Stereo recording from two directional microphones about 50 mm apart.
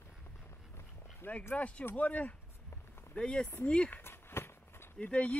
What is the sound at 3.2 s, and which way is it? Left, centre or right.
Speech, centre.